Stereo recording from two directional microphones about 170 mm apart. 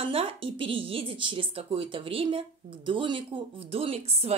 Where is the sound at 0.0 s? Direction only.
35° right (ahead or behind).